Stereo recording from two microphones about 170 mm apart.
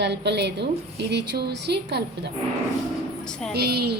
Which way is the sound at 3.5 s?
70° right (ahead or behind).